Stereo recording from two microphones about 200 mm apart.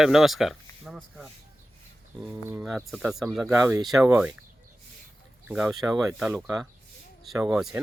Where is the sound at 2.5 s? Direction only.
5° right (ahead or behind).